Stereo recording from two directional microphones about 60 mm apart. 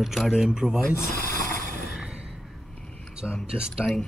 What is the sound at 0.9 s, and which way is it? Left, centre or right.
Mechanisms, left.